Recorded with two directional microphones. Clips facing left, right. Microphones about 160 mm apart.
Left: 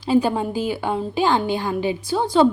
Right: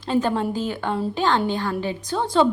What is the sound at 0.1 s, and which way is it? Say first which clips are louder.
A woman's voice: left 3 dB; 10° left (ahead or behind).